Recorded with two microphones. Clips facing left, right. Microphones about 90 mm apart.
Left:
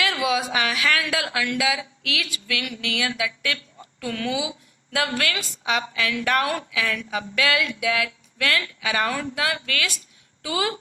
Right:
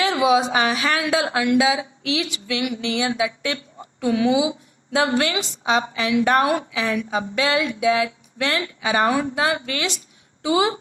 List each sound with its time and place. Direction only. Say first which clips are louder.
0.0 s speech: right 6 dB; 25° right (ahead or behind)